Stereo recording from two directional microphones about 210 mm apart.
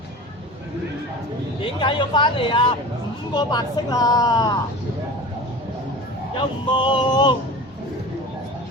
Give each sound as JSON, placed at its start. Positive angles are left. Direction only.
{"t": 1.8, "sound": "speech", "side_deg": 20}
{"t": 6.7, "sound": "speech", "side_deg": 20}